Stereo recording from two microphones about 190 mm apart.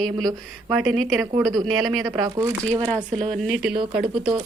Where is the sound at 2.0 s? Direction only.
20° right (ahead or behind).